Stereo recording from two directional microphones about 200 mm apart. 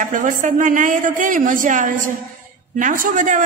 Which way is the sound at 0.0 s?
40° right (ahead or behind).